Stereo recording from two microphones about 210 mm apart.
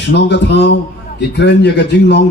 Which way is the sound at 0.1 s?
55° left (ahead or behind).